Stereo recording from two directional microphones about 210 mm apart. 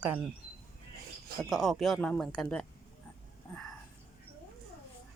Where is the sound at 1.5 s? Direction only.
Centre (ahead or behind).